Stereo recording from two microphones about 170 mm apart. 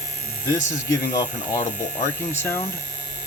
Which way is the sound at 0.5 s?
45° left (ahead or behind).